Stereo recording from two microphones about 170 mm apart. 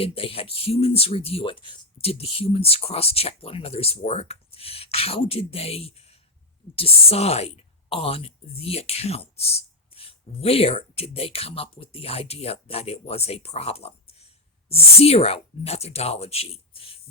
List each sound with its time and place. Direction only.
0.0 s speech: 35° left (ahead or behind)